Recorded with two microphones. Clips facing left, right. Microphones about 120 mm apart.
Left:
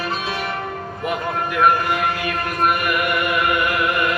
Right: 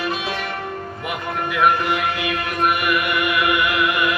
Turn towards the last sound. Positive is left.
turn(degrees=40)  # may be behind; listen again after turning